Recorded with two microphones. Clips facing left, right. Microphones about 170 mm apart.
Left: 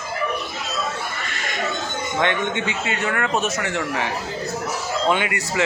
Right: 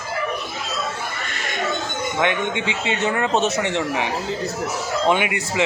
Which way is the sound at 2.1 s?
15° right (ahead or behind).